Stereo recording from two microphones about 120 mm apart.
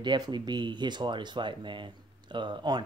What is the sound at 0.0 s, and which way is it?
Speech, 40° right (ahead or behind).